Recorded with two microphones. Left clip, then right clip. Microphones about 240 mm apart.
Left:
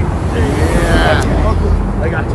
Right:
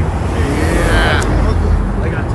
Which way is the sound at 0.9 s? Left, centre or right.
Centre.